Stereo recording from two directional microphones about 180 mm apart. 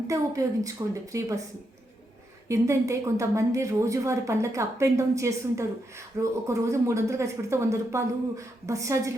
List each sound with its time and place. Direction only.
0.1 s a woman's voice: 20° right (ahead or behind)
2.5 s a woman's voice: 15° right (ahead or behind)